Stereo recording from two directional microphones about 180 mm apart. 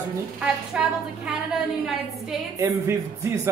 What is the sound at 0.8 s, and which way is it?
Speech, 5° right (ahead or behind).